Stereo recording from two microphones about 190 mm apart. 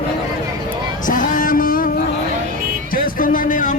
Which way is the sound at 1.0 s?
45° left (ahead or behind).